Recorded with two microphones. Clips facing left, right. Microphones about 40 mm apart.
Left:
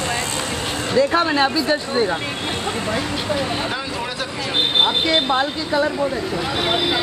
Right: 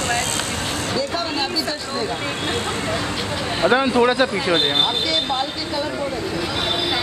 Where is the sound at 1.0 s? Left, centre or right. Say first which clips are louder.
Left 10 dB; left.